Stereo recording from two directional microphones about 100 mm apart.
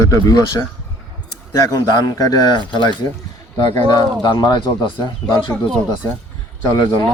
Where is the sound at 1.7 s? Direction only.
45° left (ahead or behind).